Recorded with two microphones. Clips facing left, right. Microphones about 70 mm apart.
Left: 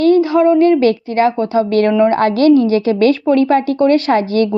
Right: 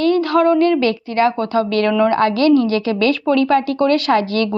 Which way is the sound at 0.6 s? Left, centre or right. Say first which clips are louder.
Left 4 dB; left.